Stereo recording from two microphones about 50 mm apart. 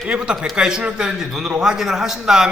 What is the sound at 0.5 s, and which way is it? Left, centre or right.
Speech, centre.